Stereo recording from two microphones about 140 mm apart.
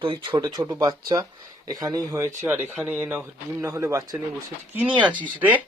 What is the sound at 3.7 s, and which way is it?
Speech, 25° right (ahead or behind).